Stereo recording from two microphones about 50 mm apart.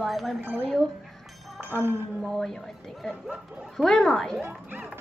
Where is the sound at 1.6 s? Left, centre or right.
Right.